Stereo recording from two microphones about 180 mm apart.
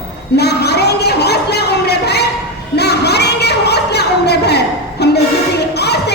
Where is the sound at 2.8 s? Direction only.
65° left (ahead or behind).